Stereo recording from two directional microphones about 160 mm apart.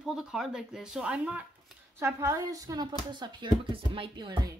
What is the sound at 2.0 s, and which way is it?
Speech, 15° right (ahead or behind).